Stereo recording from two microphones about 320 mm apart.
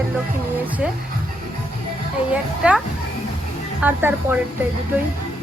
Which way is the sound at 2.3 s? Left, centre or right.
Centre.